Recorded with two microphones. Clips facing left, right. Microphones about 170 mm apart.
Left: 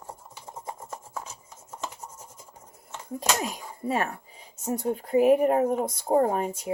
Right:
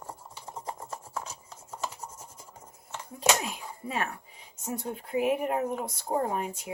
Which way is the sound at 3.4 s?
40° left (ahead or behind).